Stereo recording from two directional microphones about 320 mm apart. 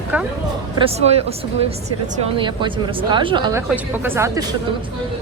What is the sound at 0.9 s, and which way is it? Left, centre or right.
A woman's voice, centre.